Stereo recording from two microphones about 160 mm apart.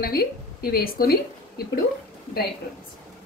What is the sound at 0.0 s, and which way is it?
A woman's voice, 70° left (ahead or behind).